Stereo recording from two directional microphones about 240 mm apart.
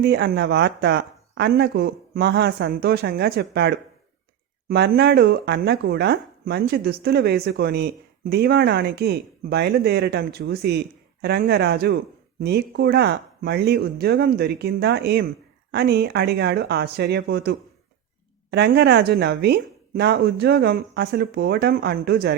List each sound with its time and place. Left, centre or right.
0.0 s a woman's voice: right